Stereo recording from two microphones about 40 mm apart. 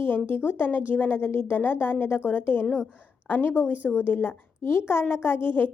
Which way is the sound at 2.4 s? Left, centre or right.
Left.